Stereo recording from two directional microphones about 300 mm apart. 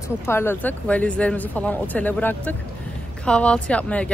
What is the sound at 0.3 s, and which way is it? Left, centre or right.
Speech, centre.